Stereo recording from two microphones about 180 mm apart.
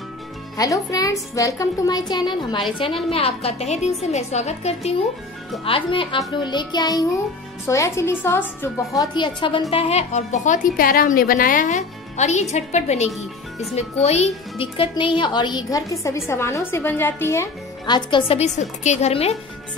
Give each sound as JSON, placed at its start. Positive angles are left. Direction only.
{"t": 0.6, "sound": "a child's voice", "side_deg": 20}